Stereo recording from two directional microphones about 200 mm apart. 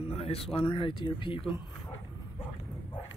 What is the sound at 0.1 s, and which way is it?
Speech, 30° left (ahead or behind).